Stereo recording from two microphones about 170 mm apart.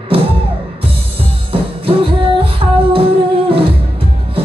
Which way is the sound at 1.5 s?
30° right (ahead or behind).